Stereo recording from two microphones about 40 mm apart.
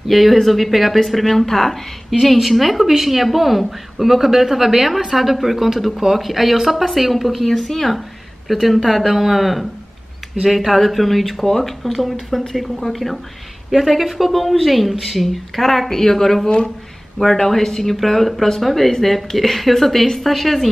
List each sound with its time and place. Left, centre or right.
0.1 s a woman's voice: centre
11.4 s speech: centre
11.8 s a woman's voice: centre
16.4 s speech: left
17.2 s a woman's voice: centre